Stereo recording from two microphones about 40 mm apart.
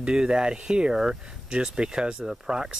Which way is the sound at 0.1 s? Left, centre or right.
Centre.